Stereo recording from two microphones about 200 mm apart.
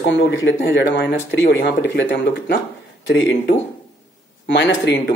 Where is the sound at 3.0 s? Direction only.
70° left (ahead or behind).